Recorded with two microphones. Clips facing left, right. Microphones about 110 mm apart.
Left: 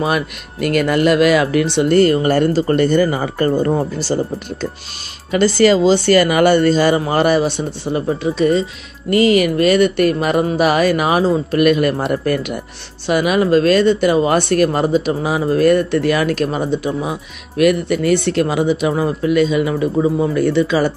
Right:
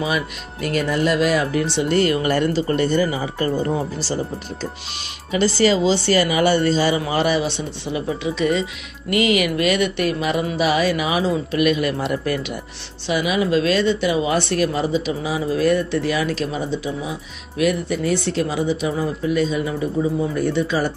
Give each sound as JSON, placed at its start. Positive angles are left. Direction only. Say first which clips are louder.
{"t": 0.0, "sound": "speech", "louder": "left 4 dB", "side_deg": 60}
{"t": 2.0, "sound": "speech", "louder": "left 5 dB", "side_deg": 40}